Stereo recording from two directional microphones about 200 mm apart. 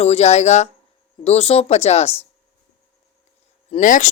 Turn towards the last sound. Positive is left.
turn(degrees=40)  # may be behind; listen again after turning